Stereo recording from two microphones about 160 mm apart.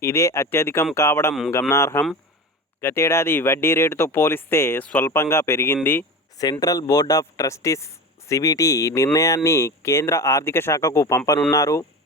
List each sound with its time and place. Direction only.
0.0 s speech: 20° left (ahead or behind)